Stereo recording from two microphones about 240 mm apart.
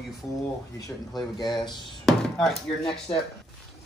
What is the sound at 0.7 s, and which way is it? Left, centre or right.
Speech, centre.